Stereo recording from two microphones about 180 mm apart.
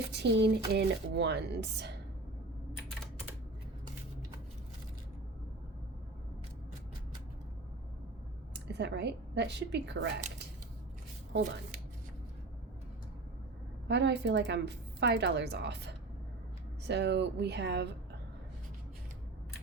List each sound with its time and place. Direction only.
0.1 s a woman's voice: 75° right (ahead or behind)
8.5 s speech: 70° right (ahead or behind)
13.8 s a woman's voice: 75° right (ahead or behind)